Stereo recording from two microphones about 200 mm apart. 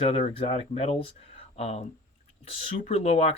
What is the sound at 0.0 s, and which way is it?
Speech, 30° left (ahead or behind).